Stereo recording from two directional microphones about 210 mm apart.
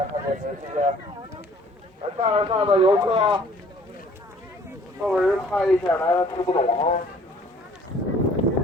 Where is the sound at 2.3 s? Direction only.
25° right (ahead or behind).